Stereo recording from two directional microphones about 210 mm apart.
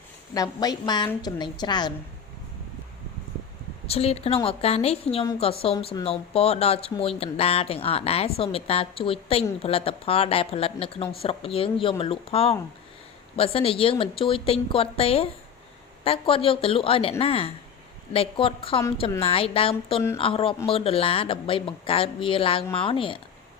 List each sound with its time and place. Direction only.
0.3 s a woman's voice: 15° left (ahead or behind)
3.8 s a woman's voice: 30° left (ahead or behind)